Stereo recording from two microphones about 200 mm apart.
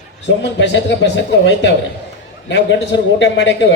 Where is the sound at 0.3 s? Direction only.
60° left (ahead or behind).